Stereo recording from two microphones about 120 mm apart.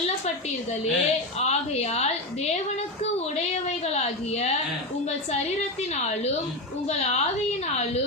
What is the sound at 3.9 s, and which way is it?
A woman's voice, 65° left (ahead or behind).